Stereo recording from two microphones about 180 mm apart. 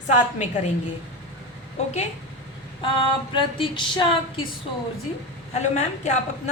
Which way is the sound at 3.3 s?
25° left (ahead or behind).